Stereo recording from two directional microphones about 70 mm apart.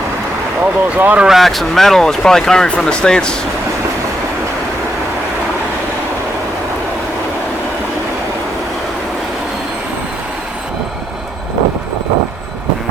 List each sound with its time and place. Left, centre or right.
0.6 s speech: right
1.3 s speech: centre